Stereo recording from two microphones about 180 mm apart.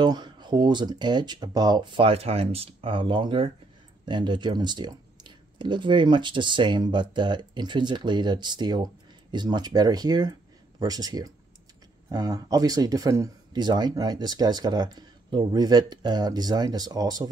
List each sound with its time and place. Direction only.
0.0 s speech: 25° right (ahead or behind)